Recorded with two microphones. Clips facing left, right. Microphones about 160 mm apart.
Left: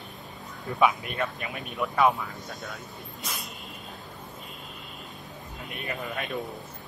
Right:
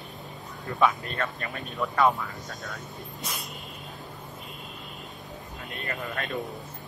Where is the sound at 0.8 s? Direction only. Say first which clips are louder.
Left 1 dB; 15° left (ahead or behind).